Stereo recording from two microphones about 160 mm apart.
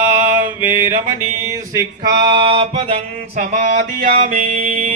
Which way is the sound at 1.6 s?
25° right (ahead or behind).